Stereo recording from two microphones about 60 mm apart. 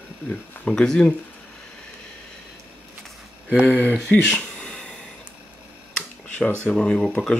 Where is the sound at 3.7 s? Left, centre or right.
Left.